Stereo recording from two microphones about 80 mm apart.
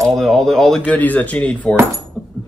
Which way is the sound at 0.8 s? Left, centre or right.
Centre.